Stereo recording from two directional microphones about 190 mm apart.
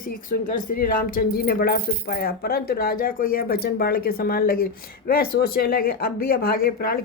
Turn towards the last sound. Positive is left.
turn(degrees=55)  # may be behind; listen again after turning